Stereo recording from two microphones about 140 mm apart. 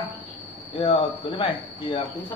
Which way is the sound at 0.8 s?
35° left (ahead or behind).